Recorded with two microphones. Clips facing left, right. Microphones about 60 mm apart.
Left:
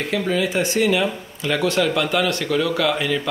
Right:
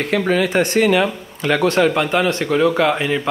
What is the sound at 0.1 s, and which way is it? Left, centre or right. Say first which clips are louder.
Speech: right 4 dB; right.